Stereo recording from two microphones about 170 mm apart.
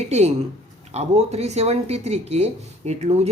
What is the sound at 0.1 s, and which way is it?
Speech, 40° right (ahead or behind).